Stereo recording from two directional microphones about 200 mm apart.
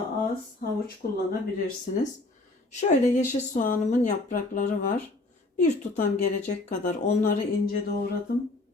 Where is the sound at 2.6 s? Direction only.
35° left (ahead or behind).